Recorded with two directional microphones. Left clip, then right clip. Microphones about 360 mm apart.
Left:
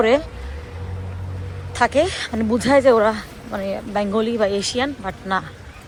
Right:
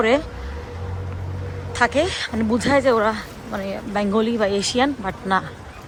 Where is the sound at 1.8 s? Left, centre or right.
Centre.